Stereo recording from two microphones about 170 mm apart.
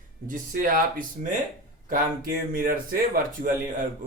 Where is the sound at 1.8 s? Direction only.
55° right (ahead or behind).